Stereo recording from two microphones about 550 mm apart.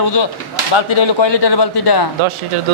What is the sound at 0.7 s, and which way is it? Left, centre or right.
Speech, left.